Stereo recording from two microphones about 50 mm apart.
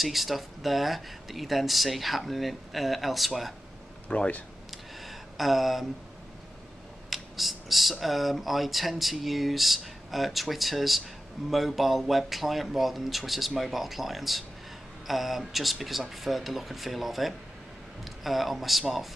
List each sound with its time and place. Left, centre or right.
0.0 s speech: centre
4.1 s speech: left
4.6 s a sound: centre
7.1 s speech: centre